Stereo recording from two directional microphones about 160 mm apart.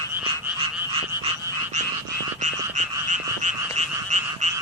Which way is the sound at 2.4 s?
50° right (ahead or behind).